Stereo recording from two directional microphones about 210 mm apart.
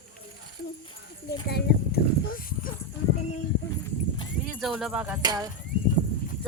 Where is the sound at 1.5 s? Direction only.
50° left (ahead or behind).